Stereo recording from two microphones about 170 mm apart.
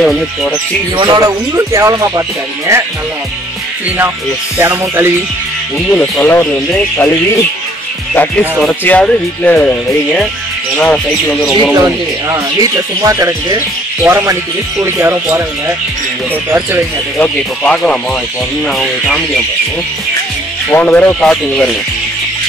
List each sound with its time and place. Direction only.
0.0 s speech: centre (ahead or behind)
0.9 s music: 25° right (ahead or behind)
4.6 s music: 15° right (ahead or behind)
5.9 s speech: 10° left (ahead or behind)
8.5 s speech: 5° left (ahead or behind)
11.7 s music: 20° right (ahead or behind)
16.4 s music: 15° right (ahead or behind)
17.2 s speech: 10° left (ahead or behind)
20.7 s speech: 10° left (ahead or behind)